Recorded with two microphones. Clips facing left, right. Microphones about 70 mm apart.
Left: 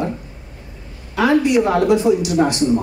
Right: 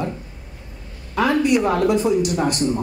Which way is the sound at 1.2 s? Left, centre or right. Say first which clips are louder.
Left 3 dB; right.